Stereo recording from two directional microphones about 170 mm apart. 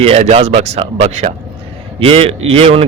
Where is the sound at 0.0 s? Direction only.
35° right (ahead or behind).